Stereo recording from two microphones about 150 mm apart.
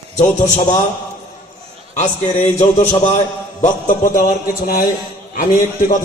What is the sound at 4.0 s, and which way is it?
Speech, 60° left (ahead or behind).